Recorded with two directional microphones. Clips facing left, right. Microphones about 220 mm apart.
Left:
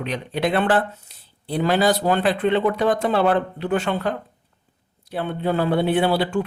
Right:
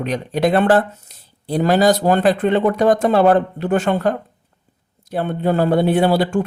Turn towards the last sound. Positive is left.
turn(degrees=-45)  # may be behind; listen again after turning